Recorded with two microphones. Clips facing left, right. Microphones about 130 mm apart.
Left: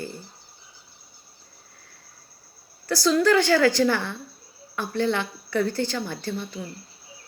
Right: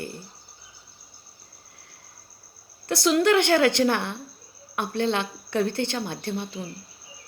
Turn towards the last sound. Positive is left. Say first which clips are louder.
# even
turn(degrees=-20)  # may be behind; listen again after turning